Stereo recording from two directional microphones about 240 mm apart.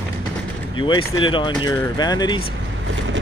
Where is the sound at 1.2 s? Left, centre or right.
Centre.